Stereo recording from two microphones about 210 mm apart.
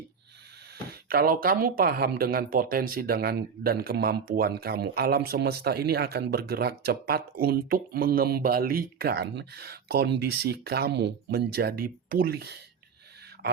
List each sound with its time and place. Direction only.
0.9 s speech: 45° right (ahead or behind)